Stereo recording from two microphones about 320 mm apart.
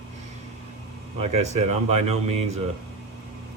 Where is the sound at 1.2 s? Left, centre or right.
Centre.